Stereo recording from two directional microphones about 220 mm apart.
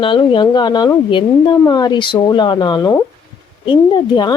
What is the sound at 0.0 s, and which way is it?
Speech, 20° left (ahead or behind).